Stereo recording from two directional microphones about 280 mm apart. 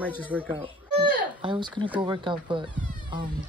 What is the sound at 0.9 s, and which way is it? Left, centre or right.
Speech, centre.